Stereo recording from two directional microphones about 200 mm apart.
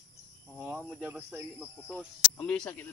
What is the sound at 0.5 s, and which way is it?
Speech, 10° right (ahead or behind).